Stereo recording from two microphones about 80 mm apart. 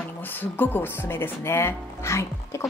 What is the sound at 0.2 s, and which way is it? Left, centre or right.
Speech, left.